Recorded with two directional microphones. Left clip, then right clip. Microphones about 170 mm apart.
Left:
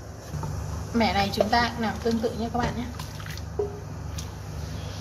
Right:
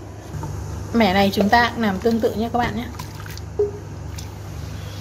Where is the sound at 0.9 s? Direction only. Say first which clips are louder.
Right 6 dB; 55° right (ahead or behind).